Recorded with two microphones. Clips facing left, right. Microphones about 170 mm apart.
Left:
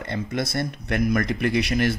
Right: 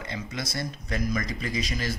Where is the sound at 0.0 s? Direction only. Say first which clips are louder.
Left 7 dB; 60° left (ahead or behind).